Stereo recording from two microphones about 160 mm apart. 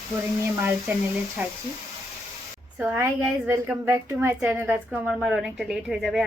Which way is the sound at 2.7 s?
15° right (ahead or behind).